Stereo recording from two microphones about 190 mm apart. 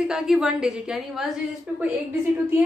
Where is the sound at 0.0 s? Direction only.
Centre (ahead or behind).